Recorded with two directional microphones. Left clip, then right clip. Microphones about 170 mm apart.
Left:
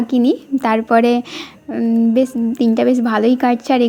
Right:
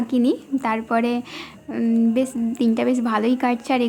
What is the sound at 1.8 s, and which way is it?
A woman's voice, 15° left (ahead or behind).